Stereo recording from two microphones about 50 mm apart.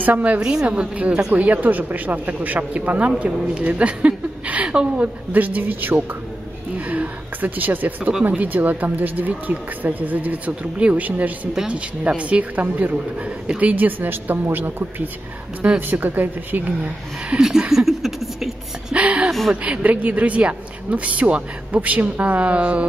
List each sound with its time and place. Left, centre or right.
0.0 s speech: right
0.4 s a woman's voice: centre
0.9 s speech: right
3.1 s a woman's voice: centre; by 6.0 s right
6.9 s a sound: right
8.0 s speech: right
8.4 s speech: right
17.4 s chuckle: centre
18.9 s a sound: right
19.5 s speech: right